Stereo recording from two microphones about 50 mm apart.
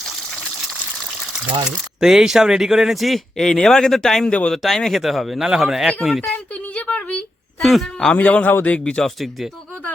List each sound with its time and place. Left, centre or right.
2.0 s speech: centre
3.3 s speech: centre
4.3 s speech: left
4.5 s speech: centre
6.8 s a sound: left
7.6 s speech: centre
8.1 s speech: left
9.0 s speech: centre